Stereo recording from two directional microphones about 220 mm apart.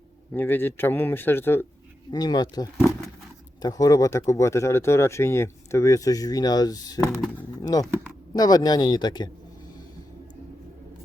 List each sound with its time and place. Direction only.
0.3 s speech: 10° left (ahead or behind)